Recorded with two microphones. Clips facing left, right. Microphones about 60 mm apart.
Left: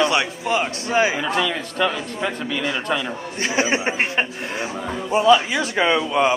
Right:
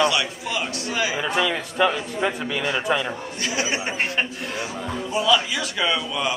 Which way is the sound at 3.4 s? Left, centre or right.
Left.